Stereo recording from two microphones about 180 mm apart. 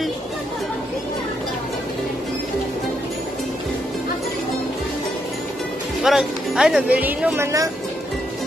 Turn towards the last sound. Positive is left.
turn(degrees=-15)  # may be behind; listen again after turning